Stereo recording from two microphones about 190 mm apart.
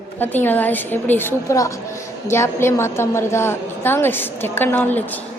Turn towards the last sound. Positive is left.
turn(degrees=10)  # may be behind; listen again after turning